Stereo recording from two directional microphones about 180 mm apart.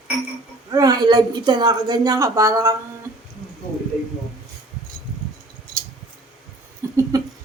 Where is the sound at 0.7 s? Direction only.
20° right (ahead or behind).